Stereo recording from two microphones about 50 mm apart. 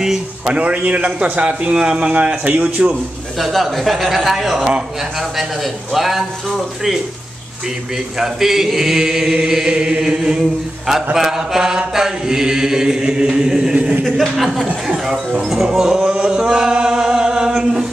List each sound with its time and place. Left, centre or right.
0.0 s speech: centre
0.6 s a man's voice: right
3.3 s a man's voice: centre
5.9 s a man's voice: centre
8.2 s chant: centre
14.0 s a man's voice: centre
15.0 s chant: centre
16.0 s chant: centre